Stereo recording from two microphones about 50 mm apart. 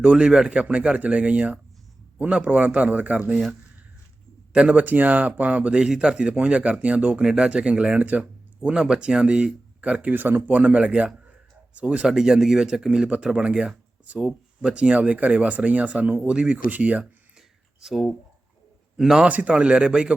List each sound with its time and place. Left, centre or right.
0.0 s speech: centre
4.5 s speech: right
5.7 s speech: centre
7.2 s speech: centre; by 8.7 s right
8.7 s speech: centre
12.0 s speech: centre; by 17.0 s right
17.0 s a sound: centre
18.9 s speech: centre
19.3 s speech: right